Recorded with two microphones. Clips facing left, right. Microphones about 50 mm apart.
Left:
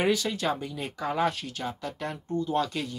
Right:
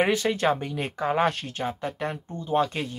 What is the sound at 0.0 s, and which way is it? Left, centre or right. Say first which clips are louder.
Speech: right 4 dB; right.